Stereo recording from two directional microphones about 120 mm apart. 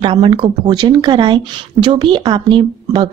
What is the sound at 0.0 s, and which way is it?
Speech, 45° right (ahead or behind).